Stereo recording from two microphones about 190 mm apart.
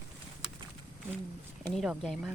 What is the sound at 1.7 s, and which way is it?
Speech, centre (ahead or behind).